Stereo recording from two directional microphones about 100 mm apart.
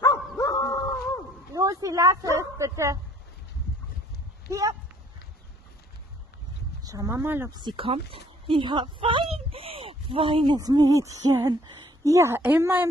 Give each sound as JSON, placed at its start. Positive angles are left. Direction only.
{"t": 0.4, "sound": "dog", "side_deg": 40}
{"t": 1.5, "sound": "a sound", "side_deg": -35}
{"t": 2.3, "sound": "hoot", "side_deg": -30}
{"t": 4.5, "sound": "hoot", "side_deg": -30}
{"t": 6.8, "sound": "speech", "side_deg": -35}
{"t": 7.2, "sound": "a woman's voice", "side_deg": -25}
{"t": 7.5, "sound": "speech", "side_deg": -55}
{"t": 10.6, "sound": "hoot", "side_deg": -40}
{"t": 12.0, "sound": "a woman's voice", "side_deg": -30}